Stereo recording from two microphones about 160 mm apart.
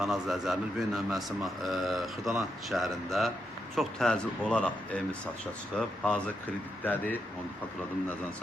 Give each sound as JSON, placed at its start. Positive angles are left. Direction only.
{"t": 0.0, "sound": "a man's voice", "side_deg": 0}